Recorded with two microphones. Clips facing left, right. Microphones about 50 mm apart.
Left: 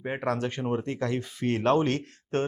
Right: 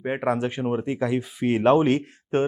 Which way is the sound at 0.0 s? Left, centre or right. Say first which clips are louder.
Right 5 dB; centre.